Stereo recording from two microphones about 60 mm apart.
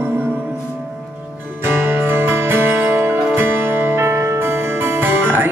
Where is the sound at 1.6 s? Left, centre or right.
Right.